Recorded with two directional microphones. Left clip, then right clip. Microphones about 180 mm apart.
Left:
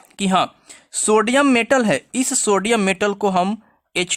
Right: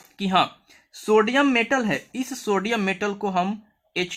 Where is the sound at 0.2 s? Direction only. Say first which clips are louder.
Left 3 dB; 55° left (ahead or behind).